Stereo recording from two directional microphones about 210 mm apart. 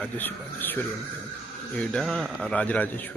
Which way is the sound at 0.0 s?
10° left (ahead or behind).